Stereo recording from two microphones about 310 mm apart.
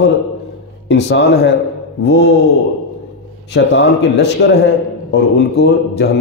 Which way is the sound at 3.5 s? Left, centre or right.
Left.